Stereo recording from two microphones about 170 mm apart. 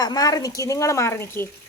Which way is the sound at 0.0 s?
20° left (ahead or behind).